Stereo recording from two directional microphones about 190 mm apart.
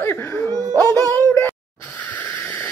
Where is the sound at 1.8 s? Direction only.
10° left (ahead or behind).